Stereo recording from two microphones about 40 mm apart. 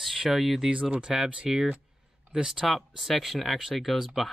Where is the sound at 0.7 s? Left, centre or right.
Right.